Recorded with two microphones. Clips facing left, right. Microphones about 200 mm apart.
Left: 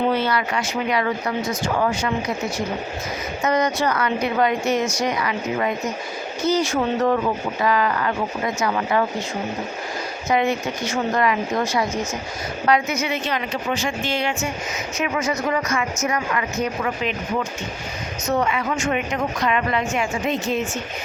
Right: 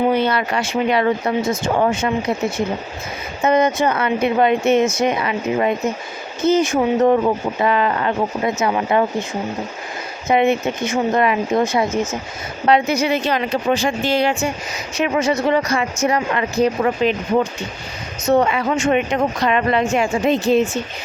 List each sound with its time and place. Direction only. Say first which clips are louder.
0.1 s speech: right 4 dB; 20° right (ahead or behind)
10.2 s speech: right 5 dB; 20° right (ahead or behind)